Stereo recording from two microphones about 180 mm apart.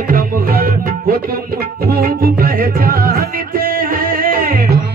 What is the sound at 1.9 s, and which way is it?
Music, 55° right (ahead or behind).